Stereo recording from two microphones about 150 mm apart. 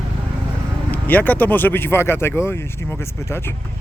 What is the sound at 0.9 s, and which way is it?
Speech, 10° left (ahead or behind).